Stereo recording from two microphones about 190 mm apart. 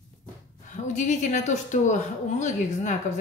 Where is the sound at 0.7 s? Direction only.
40° left (ahead or behind).